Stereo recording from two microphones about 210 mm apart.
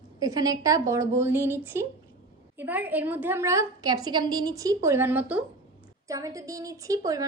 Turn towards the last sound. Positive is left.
turn(degrees=-15)  # may be behind; listen again after turning